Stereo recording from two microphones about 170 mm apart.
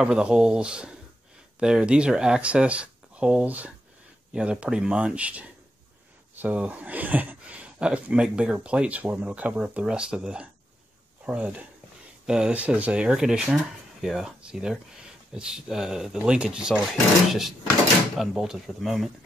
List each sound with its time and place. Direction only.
0.0 s speech: 5° right (ahead or behind)